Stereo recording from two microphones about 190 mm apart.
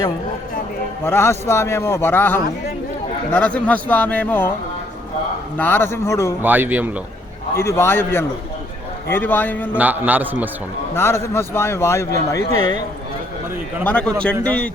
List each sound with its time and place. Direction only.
1.0 s a man's voice: 10° left (ahead or behind)
5.5 s a man's voice: 10° left (ahead or behind)
6.4 s a man's voice: 10° right (ahead or behind)
7.5 s a man's voice: 10° left (ahead or behind)
9.7 s a man's voice: 10° right (ahead or behind)
10.9 s a man's voice: 15° left (ahead or behind)
13.8 s a man's voice: 5° left (ahead or behind)